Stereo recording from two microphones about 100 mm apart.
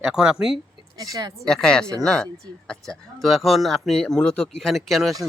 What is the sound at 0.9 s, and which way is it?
Speech, 40° right (ahead or behind).